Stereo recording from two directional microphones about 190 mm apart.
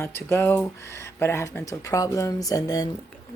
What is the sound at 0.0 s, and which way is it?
A woman's voice, 10° left (ahead or behind).